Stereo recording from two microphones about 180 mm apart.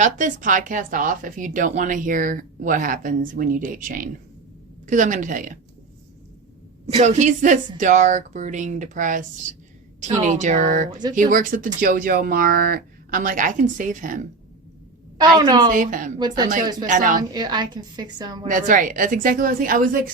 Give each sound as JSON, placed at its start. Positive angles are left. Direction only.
{"t": 0.0, "sound": "speech", "side_deg": -45}
{"t": 6.8, "sound": "speech", "side_deg": -40}
{"t": 10.2, "sound": "speech", "side_deg": -40}
{"t": 15.4, "sound": "a woman's voice", "side_deg": -25}
{"t": 15.7, "sound": "speech", "side_deg": -50}
{"t": 17.3, "sound": "a woman's voice", "side_deg": -25}
{"t": 18.4, "sound": "speech", "side_deg": -45}